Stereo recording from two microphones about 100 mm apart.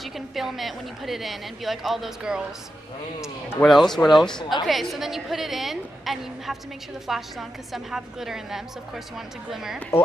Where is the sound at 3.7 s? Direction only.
Centre (ahead or behind).